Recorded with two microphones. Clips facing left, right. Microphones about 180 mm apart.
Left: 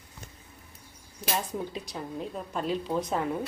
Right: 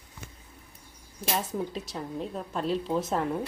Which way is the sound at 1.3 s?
Centre (ahead or behind).